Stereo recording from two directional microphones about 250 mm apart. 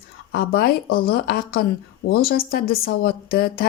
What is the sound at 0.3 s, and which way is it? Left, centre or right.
A woman's voice, left.